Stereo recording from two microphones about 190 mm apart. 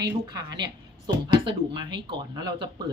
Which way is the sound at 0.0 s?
20° right (ahead or behind).